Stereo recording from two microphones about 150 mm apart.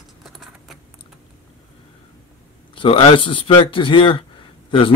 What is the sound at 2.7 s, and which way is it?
A man's voice, 35° left (ahead or behind).